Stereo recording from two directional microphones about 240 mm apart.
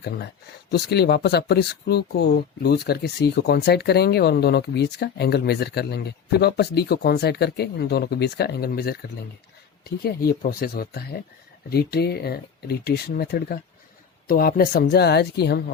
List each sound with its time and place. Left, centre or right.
0.7 s speech: left